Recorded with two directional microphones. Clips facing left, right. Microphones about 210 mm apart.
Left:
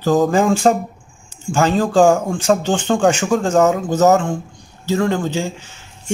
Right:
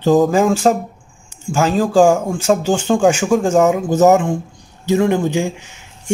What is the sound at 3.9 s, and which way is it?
Speech, 15° right (ahead or behind).